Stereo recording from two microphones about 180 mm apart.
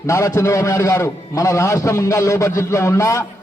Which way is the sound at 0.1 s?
15° left (ahead or behind).